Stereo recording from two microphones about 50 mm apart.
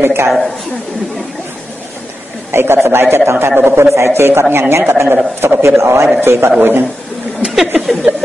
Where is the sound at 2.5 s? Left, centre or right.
Right.